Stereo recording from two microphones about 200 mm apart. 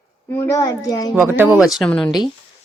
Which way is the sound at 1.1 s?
10° right (ahead or behind).